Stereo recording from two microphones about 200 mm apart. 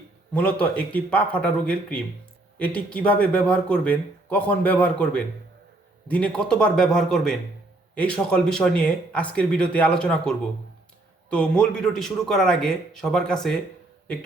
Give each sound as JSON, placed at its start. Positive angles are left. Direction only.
{"t": 0.6, "sound": "speech", "side_deg": 5}